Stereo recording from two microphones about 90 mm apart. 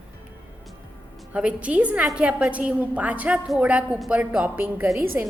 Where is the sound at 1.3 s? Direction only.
15° right (ahead or behind).